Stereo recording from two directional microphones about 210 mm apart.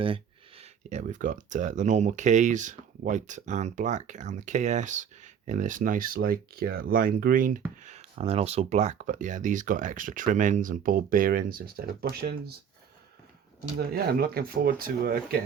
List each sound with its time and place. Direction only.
0.0 s speech: 25° right (ahead or behind); by 12.5 s 50° right (ahead or behind)
13.7 s speech: 45° right (ahead or behind)